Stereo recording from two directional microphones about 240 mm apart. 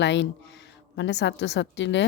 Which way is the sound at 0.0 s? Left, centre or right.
Left.